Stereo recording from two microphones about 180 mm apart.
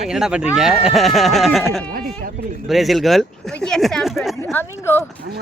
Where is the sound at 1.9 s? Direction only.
55° right (ahead or behind).